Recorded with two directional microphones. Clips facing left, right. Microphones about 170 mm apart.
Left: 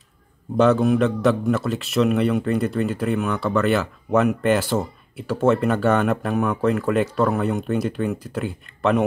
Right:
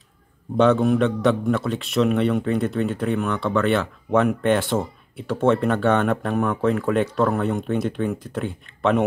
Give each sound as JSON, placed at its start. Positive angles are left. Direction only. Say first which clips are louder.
{"t": 0.6, "sound": "a man's voice", "louder": "even", "side_deg": 0}